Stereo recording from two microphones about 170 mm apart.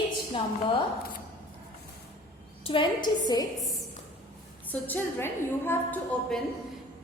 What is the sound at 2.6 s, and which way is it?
Speech, 30° left (ahead or behind).